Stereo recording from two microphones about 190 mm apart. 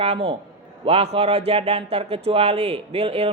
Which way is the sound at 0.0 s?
30° right (ahead or behind).